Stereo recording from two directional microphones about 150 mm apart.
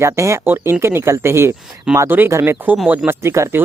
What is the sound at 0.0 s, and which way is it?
Speech, 20° right (ahead or behind).